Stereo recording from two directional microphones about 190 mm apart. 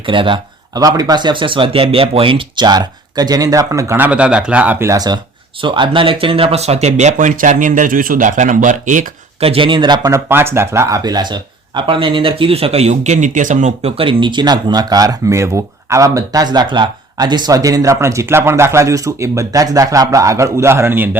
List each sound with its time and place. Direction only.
0.0 s speech: 25° right (ahead or behind); by 21.2 s 10° right (ahead or behind)